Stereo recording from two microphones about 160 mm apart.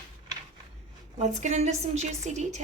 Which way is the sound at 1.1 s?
45° right (ahead or behind).